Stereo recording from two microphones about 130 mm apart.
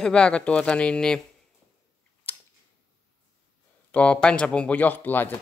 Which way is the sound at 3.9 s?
10° left (ahead or behind).